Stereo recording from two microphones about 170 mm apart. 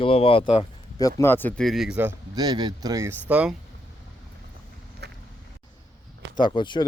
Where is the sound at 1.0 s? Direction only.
20° left (ahead or behind); by 2.2 s 10° right (ahead or behind).